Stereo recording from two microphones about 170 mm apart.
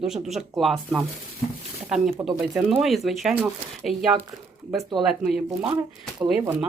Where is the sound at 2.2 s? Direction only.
Centre (ahead or behind).